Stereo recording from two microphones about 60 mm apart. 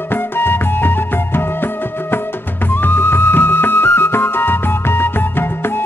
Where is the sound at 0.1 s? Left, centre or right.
Left.